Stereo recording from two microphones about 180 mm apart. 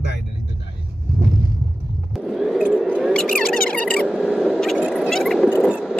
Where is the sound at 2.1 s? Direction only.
Centre (ahead or behind).